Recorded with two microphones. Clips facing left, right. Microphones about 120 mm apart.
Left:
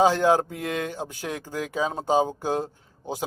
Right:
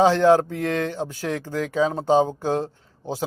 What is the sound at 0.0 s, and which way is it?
Speech, 10° left (ahead or behind).